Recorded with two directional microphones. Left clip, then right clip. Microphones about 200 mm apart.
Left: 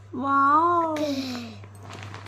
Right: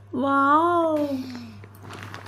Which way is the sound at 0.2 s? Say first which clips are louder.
Even; 25° right (ahead or behind).